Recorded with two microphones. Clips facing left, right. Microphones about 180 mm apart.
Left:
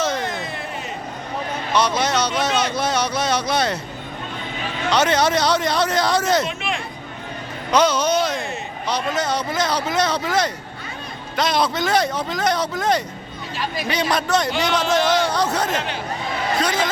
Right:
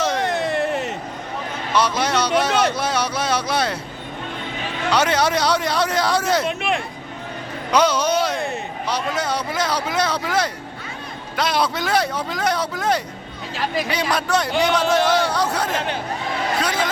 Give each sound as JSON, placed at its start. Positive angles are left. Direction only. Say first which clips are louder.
{"t": 0.2, "sound": "a sound", "louder": "right 7 dB", "side_deg": -75}
{"t": 1.7, "sound": "speech", "louder": "even", "side_deg": -10}
{"t": 4.9, "sound": "speech", "louder": "left 1 dB", "side_deg": -10}
{"t": 6.6, "sound": "speech", "louder": "right 4 dB", "side_deg": -55}
{"t": 7.7, "sound": "a man's voice", "louder": "even", "side_deg": -10}